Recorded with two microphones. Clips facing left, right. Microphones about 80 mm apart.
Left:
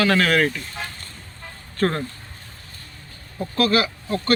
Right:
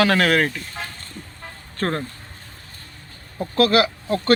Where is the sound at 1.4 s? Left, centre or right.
Right.